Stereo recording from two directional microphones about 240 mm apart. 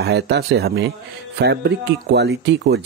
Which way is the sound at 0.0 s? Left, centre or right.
Right.